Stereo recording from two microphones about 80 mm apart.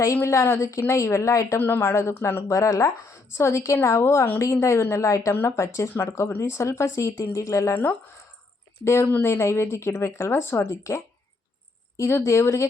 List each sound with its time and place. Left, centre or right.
0.0 s a woman's voice: left
1.5 s a woman's voice: left
2.5 s a woman's voice: left